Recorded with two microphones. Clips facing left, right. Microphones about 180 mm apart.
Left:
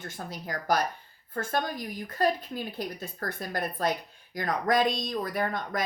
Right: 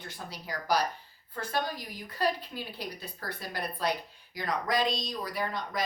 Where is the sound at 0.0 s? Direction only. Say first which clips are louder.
Left 4 dB; 50° left (ahead or behind).